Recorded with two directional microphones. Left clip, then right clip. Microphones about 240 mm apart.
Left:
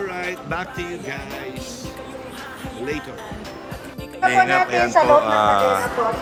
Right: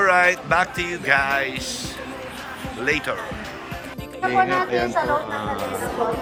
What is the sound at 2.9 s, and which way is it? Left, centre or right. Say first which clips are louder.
Speech: right 6 dB; centre.